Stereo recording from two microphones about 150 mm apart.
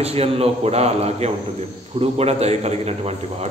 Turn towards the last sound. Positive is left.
turn(degrees=-45)  # may be behind; listen again after turning